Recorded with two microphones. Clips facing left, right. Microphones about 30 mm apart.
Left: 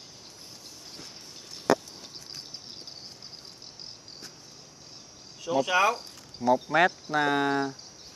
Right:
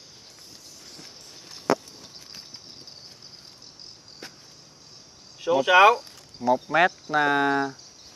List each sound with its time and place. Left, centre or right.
5.4 s speech: right
5.9 s speech: centre